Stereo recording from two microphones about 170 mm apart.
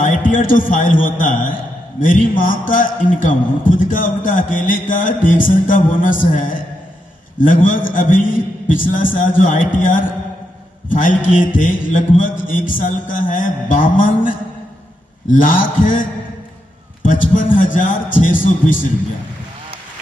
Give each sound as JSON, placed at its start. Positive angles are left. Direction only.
{"t": 0.0, "sound": "a man's voice", "side_deg": 50}